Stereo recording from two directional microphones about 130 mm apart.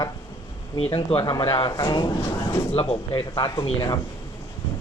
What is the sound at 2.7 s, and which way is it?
Speech, 45° left (ahead or behind).